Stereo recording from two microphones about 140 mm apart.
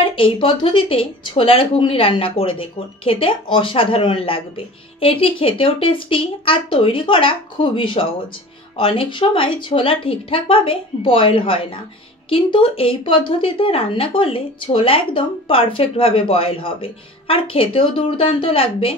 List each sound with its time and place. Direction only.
0.1 s speech: 40° left (ahead or behind)